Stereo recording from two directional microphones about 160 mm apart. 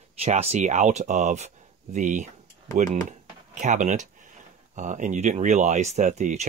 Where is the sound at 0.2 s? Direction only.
40° right (ahead or behind).